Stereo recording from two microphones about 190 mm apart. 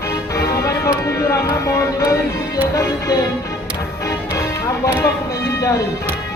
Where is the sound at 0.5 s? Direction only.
15° left (ahead or behind).